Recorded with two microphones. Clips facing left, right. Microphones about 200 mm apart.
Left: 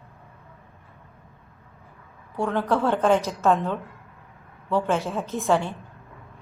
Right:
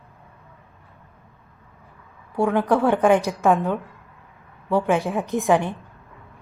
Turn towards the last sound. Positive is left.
turn(degrees=-15)  # may be behind; listen again after turning